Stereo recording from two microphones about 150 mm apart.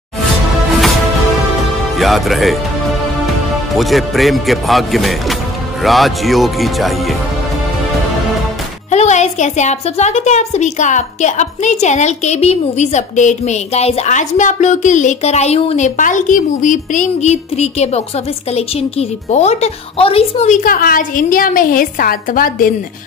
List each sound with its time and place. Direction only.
2.0 s speech: centre (ahead or behind)
3.7 s speech: centre (ahead or behind)
8.9 s a woman's voice: 50° left (ahead or behind); by 22.7 s 70° left (ahead or behind)